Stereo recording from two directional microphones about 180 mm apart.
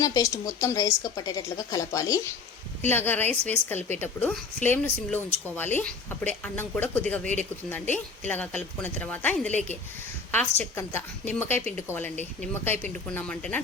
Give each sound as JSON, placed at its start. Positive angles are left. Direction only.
{"t": 0.0, "sound": "a woman's voice", "side_deg": 20}